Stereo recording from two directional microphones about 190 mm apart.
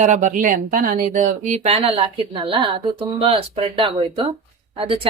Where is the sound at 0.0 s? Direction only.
40° right (ahead or behind).